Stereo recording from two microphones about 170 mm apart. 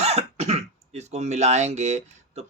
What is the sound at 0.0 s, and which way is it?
Speech, 40° right (ahead or behind).